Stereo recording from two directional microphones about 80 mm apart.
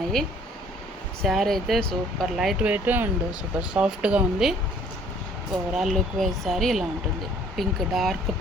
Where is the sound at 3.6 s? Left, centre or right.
Centre.